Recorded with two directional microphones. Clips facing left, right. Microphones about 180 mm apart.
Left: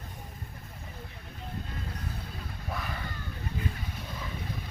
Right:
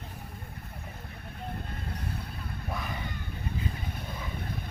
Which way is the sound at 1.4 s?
55° right (ahead or behind).